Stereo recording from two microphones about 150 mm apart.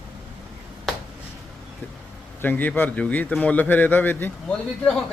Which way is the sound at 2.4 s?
10° left (ahead or behind).